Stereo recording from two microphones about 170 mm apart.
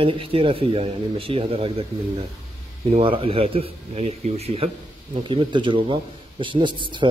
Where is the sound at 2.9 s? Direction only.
35° right (ahead or behind).